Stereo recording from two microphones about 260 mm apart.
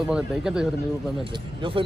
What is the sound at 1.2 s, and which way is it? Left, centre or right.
Speech, centre.